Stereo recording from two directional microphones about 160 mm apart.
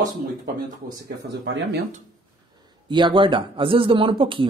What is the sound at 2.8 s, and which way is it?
Speech, 30° right (ahead or behind).